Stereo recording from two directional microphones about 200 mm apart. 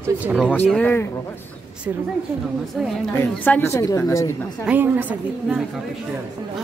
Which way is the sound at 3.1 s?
10° left (ahead or behind).